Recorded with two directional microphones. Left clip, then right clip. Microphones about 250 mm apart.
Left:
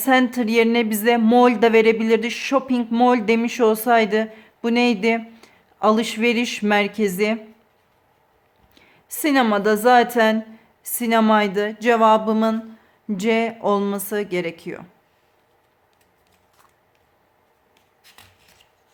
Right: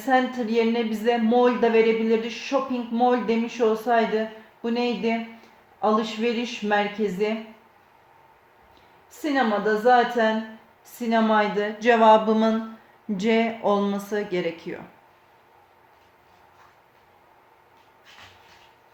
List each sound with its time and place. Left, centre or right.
0.0 s speech: left
9.2 s speech: left